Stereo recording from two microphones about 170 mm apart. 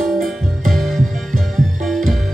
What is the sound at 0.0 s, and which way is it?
Music, centre (ahead or behind).